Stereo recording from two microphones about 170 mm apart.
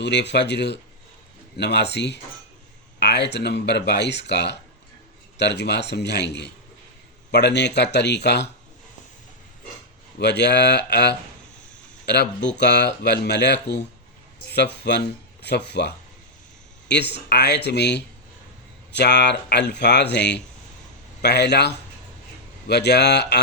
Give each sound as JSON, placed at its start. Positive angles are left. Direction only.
{"t": 0.0, "sound": "speech", "side_deg": 90}
{"t": 10.2, "sound": "speech", "side_deg": 90}
{"t": 17.2, "sound": "speech", "side_deg": 80}